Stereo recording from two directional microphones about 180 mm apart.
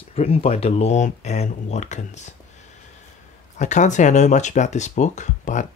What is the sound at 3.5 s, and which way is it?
Speech, 40° left (ahead or behind).